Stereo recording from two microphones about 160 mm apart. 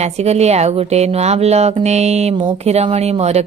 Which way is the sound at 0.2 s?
40° right (ahead or behind).